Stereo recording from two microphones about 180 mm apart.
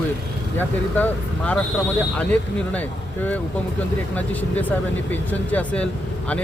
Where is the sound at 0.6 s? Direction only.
10° left (ahead or behind).